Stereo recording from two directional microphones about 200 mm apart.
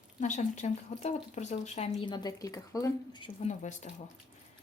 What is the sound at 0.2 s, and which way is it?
Speech, 40° left (ahead or behind).